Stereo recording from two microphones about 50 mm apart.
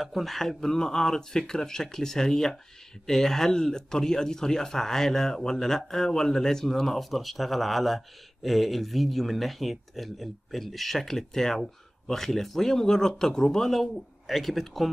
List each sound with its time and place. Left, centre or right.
0.0 s speech: centre